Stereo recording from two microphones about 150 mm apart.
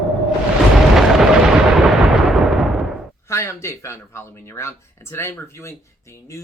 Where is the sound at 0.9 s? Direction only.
Centre (ahead or behind).